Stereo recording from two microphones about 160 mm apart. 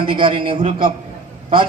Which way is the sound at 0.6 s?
50° right (ahead or behind).